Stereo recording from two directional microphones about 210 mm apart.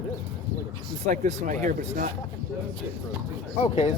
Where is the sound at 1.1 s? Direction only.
35° right (ahead or behind).